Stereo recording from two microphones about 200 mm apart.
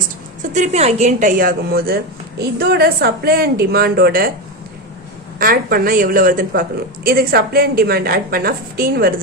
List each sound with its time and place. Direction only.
0.5 s a woman's voice: 35° right (ahead or behind)
5.4 s a woman's voice: 45° right (ahead or behind)